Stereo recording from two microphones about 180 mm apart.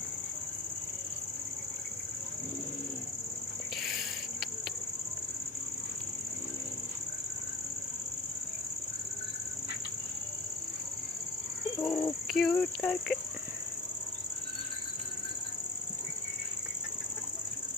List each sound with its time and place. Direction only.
3.8 s cricket: centre (ahead or behind)
11.9 s a sound: 15° left (ahead or behind)
12.3 s cricket: centre (ahead or behind)